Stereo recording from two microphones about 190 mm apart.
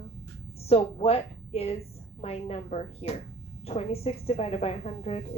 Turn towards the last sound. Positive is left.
turn(degrees=35)  # may be behind; listen again after turning